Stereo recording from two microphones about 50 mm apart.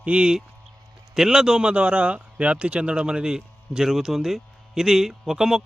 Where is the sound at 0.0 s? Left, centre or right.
Right.